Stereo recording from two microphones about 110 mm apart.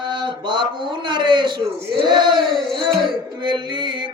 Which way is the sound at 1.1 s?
45° right (ahead or behind).